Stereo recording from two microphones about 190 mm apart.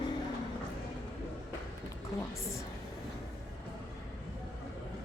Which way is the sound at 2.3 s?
15° left (ahead or behind).